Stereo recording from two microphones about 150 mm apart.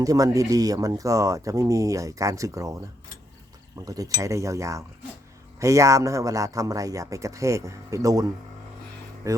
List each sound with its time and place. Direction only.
0.0 s speech: 25° right (ahead or behind)
3.8 s speech: 25° right (ahead or behind)